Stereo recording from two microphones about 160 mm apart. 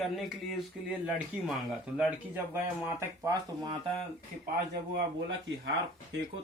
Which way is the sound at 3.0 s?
20° right (ahead or behind).